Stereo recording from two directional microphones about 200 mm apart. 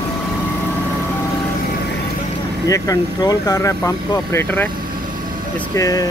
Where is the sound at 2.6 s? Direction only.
15° left (ahead or behind).